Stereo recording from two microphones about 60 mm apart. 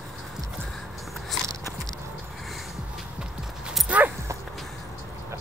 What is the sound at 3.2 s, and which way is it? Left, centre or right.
Clip-clop, centre.